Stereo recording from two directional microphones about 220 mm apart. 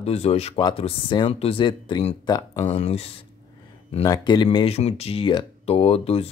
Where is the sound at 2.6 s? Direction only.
30° left (ahead or behind).